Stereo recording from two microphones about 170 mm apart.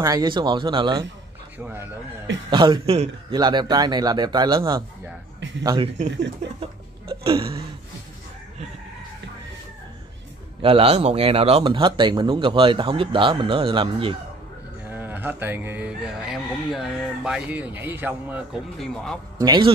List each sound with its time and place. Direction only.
0.0 s speech: 20° right (ahead or behind)
1.6 s speech: 10° right (ahead or behind)
2.5 s speech: 25° right (ahead or behind)
6.6 s hiccup: 30° right (ahead or behind)
10.6 s speech: 35° right (ahead or behind)
14.9 s speech: 10° right (ahead or behind)
19.4 s speech: 25° right (ahead or behind)